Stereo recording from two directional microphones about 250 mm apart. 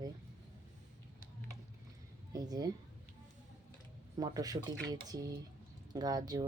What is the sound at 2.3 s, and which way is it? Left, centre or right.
Speech, centre.